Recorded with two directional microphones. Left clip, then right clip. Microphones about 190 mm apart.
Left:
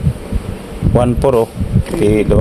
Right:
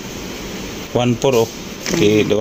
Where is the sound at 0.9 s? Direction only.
15° left (ahead or behind).